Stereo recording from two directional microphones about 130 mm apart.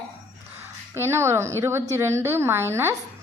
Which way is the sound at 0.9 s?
20° right (ahead or behind).